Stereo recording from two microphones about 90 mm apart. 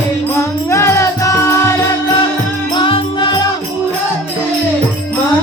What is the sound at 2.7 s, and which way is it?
Music, 65° left (ahead or behind).